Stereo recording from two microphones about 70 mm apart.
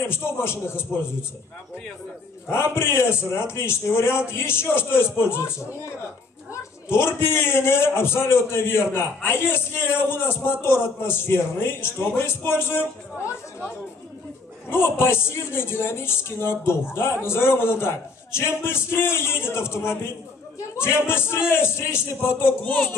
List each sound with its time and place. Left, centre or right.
0.1 s a man's voice: left
2.4 s a man's voice: left
14.7 s a man's voice: left